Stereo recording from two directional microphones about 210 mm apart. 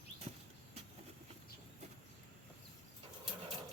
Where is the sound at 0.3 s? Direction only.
25° right (ahead or behind).